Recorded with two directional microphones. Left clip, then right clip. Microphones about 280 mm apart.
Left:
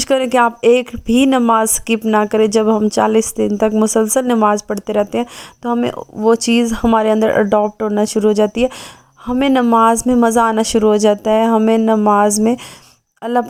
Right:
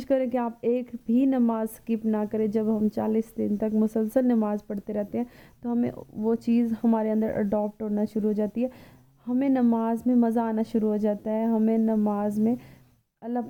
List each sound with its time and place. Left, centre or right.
0.2 s speech: centre